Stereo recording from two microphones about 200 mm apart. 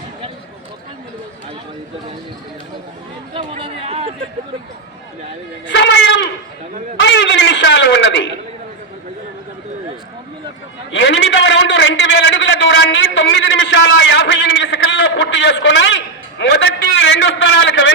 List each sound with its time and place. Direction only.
3.3 s speech: 30° right (ahead or behind)
5.6 s a man's voice: 65° left (ahead or behind)
10.9 s a man's voice: 65° left (ahead or behind)